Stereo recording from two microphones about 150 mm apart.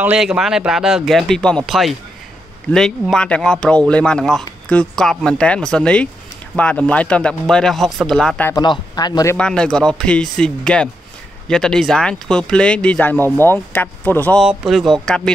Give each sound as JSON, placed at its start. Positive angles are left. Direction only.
{"t": 0.0, "sound": "speech", "side_deg": -10}
{"t": 8.5, "sound": "speech", "side_deg": 25}
{"t": 9.4, "sound": "speech", "side_deg": 5}
{"t": 14.4, "sound": "speech", "side_deg": 0}